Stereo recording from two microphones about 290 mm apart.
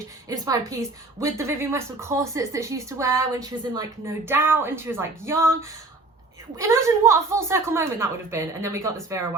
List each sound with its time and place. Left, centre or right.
0.3 s a woman's voice: centre
6.6 s a woman's voice: centre